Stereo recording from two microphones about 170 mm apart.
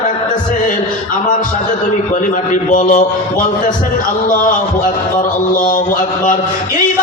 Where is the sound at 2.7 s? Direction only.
50° left (ahead or behind).